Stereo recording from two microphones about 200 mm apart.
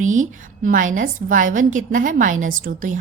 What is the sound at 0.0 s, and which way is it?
A woman's voice, 40° right (ahead or behind).